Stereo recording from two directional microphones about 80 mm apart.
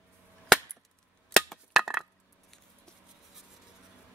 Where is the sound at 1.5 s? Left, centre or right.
Centre.